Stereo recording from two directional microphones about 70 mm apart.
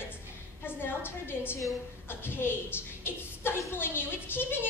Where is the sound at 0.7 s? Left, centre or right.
Left.